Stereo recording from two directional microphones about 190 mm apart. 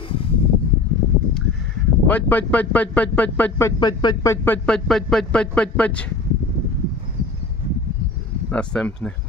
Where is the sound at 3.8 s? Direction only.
20° left (ahead or behind).